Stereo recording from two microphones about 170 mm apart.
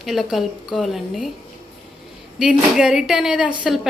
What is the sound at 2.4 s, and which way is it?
A woman's voice, 5° right (ahead or behind).